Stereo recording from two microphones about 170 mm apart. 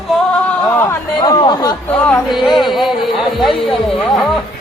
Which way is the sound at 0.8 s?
15° left (ahead or behind).